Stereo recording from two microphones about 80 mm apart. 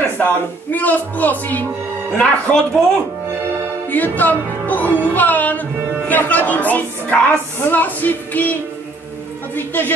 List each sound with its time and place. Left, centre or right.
0.2 s a woman's voice: left
2.1 s speech: centre
3.9 s a woman's voice: left
9.7 s a woman's voice: left